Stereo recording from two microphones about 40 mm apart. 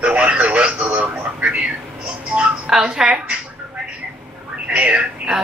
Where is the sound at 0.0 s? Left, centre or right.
Right.